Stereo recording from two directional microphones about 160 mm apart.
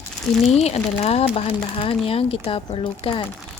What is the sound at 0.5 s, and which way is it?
Speech, 40° left (ahead or behind).